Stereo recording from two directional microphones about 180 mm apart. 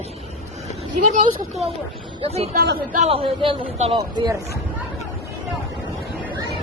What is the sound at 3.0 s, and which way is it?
A man's voice, 30° right (ahead or behind).